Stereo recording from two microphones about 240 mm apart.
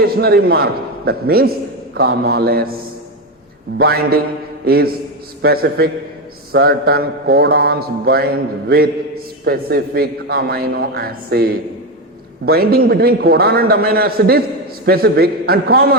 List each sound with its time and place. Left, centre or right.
0.0 s speech: right
3.8 s a man's voice: right